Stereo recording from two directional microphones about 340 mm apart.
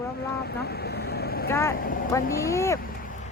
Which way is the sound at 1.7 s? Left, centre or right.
Left.